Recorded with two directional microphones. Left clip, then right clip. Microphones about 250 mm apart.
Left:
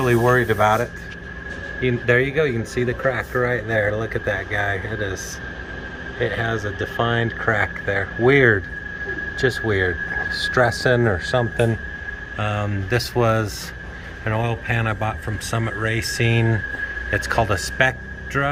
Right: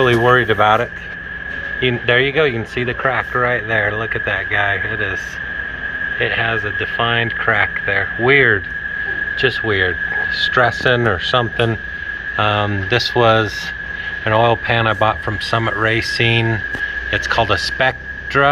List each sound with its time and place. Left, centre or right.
0.0 s speech: centre
2.0 s speech: centre
6.1 s speech: left
8.3 s speech: left
9.5 s speech: centre